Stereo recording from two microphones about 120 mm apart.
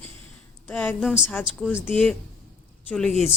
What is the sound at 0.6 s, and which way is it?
Speech, 15° left (ahead or behind).